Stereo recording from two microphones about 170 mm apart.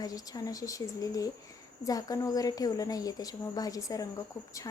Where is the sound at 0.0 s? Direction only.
20° left (ahead or behind).